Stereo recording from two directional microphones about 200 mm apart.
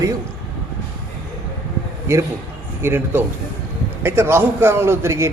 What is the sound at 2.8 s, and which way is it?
A man's voice, 10° right (ahead or behind).